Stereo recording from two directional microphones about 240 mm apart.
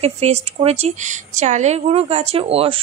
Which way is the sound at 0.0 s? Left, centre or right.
Right.